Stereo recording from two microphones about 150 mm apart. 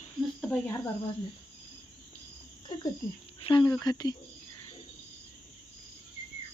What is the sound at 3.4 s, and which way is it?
Speech, 30° left (ahead or behind).